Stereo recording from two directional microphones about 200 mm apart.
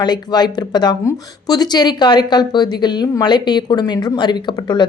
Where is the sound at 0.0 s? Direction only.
20° left (ahead or behind).